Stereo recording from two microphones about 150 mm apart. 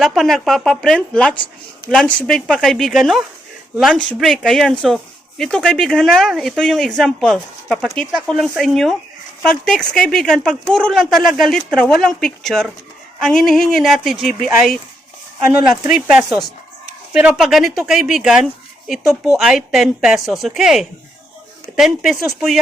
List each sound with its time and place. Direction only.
0.0 s speech: centre (ahead or behind)